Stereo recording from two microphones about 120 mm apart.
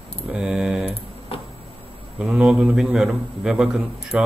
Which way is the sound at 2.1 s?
10° right (ahead or behind).